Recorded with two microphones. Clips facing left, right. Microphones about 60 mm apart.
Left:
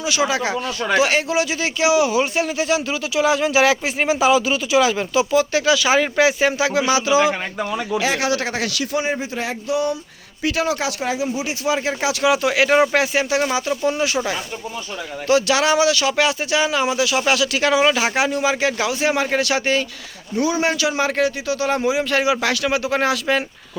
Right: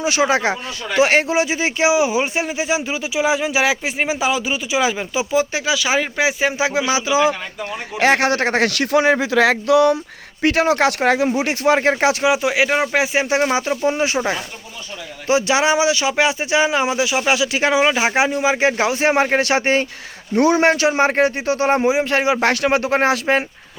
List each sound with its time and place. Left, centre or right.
0.0 s a man's voice: right; by 6.6 s centre
6.6 s speech: right
7.9 s speech: right
10.4 s speech: right
12.2 s speech: centre
13.1 s speech: right
15.3 s speech: right
20.3 s a man's voice: right